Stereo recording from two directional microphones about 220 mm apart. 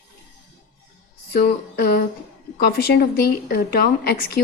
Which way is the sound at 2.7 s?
45° left (ahead or behind).